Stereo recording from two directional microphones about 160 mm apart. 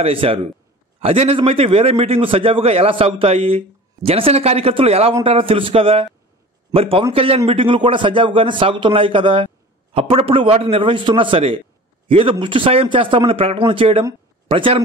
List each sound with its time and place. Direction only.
0.0 s a man's voice: 35° right (ahead or behind)